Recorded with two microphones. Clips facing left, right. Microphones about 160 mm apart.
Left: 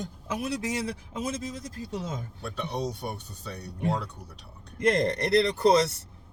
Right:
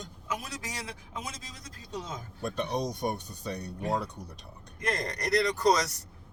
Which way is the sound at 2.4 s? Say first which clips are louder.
Right 2 dB; 15° right (ahead or behind).